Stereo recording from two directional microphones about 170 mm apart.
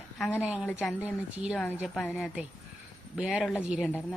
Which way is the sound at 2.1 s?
5° right (ahead or behind).